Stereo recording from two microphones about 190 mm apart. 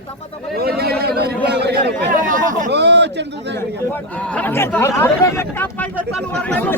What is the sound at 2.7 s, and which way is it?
Speech, 65° right (ahead or behind).